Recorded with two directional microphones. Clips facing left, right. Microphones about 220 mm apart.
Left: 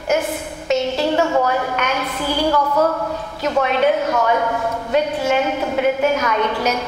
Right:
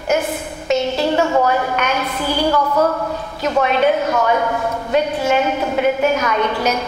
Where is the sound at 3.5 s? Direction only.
15° right (ahead or behind).